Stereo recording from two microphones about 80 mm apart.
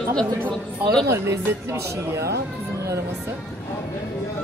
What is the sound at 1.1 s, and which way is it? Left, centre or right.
Speech, right.